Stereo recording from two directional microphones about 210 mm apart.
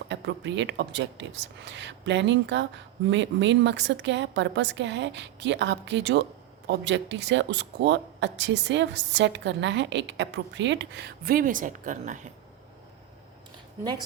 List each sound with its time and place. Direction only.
0.1 s speech: 60° right (ahead or behind); by 12.3 s 35° right (ahead or behind)